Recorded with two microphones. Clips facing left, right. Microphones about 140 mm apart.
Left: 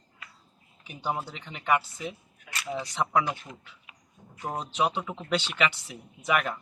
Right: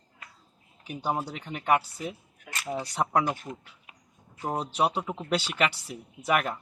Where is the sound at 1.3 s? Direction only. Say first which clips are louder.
Right 1 dB; 50° right (ahead or behind).